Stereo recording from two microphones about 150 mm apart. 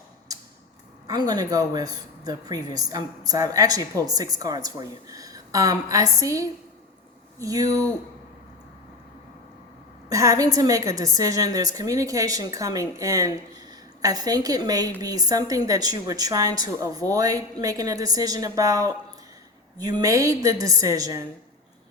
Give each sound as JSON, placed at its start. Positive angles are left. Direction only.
{"t": 0.3, "sound": "a sound", "side_deg": -25}
{"t": 1.0, "sound": "a woman's voice", "side_deg": -25}
{"t": 10.1, "sound": "a woman's voice", "side_deg": -20}